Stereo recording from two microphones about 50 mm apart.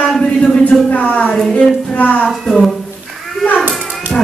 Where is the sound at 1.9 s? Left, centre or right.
Left.